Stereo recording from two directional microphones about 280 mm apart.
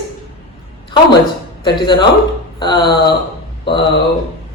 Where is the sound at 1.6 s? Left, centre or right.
Centre.